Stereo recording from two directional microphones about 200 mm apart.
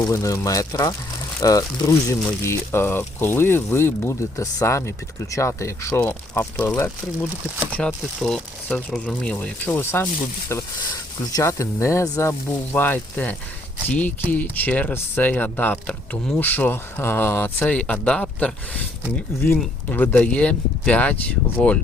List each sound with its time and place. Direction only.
0.0 s speech: 15° left (ahead or behind)